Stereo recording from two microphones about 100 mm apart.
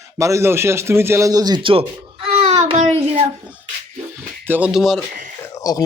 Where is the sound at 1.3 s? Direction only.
40° right (ahead or behind).